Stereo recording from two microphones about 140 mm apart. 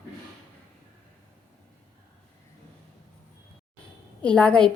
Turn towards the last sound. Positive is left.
turn(degrees=5)  # may be behind; listen again after turning